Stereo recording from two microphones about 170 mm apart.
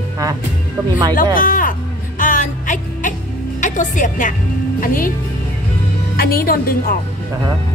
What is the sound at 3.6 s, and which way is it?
Speech, 45° left (ahead or behind).